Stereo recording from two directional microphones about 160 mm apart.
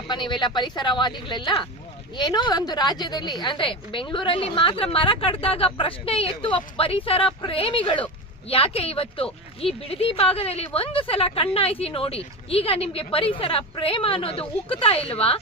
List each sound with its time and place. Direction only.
0.1 s a woman's voice: 30° left (ahead or behind)